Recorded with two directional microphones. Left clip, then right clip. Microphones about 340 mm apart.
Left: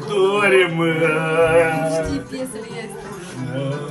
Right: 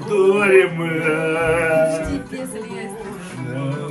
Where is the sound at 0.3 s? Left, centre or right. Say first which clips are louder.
Right 2 dB; centre.